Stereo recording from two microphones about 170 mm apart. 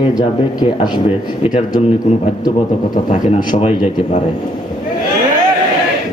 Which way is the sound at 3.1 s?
45° left (ahead or behind).